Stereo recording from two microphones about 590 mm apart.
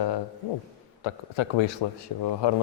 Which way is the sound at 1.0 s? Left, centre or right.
Left.